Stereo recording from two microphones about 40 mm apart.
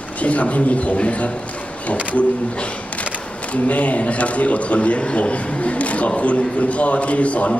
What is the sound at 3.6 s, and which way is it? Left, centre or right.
A man's voice, left.